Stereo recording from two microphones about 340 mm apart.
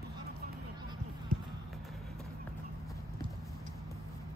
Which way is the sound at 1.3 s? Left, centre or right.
Right.